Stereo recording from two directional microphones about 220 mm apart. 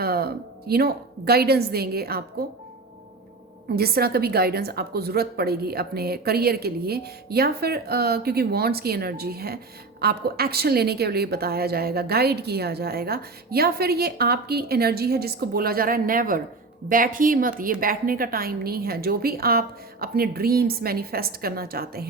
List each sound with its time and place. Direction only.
0.0 s a woman's voice: 45° right (ahead or behind)
3.8 s a woman's voice: 45° right (ahead or behind)